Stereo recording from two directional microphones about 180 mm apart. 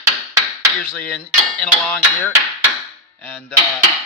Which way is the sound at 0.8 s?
5° left (ahead or behind).